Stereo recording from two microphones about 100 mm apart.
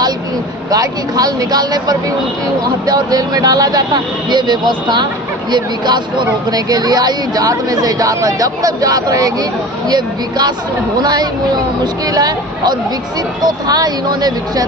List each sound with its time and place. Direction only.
0.7 s speech: 40° right (ahead or behind)